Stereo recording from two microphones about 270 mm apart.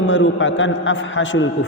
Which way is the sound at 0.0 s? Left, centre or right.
Left.